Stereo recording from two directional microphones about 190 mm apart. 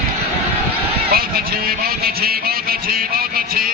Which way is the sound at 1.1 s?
50° right (ahead or behind).